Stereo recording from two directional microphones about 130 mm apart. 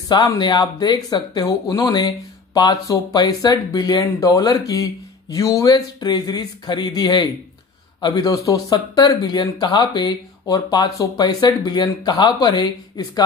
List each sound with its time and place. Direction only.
0.4 s speech: 35° left (ahead or behind)